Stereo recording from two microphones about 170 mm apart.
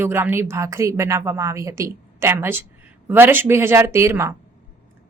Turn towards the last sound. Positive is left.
turn(degrees=-15)  # may be behind; listen again after turning